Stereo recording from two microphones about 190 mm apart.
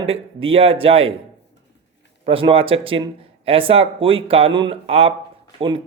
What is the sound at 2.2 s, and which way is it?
A man's voice, 30° right (ahead or behind).